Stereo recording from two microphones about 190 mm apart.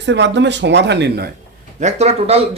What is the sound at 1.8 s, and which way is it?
Speech, 35° right (ahead or behind).